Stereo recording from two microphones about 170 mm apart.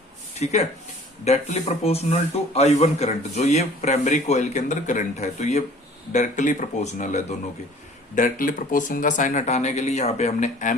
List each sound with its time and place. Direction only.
0.3 s speech: 40° left (ahead or behind)